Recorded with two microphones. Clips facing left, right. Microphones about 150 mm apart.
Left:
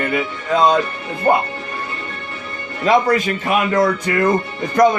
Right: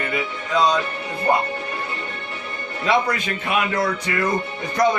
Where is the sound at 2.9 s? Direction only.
45° left (ahead or behind).